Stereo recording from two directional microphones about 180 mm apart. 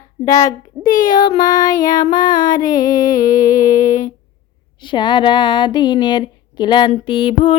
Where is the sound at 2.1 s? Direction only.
50° left (ahead or behind).